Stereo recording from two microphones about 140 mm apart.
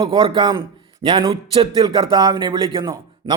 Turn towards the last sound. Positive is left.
turn(degrees=-25)  # may be behind; listen again after turning